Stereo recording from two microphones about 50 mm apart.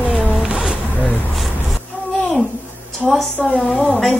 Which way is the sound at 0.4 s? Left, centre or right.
Centre.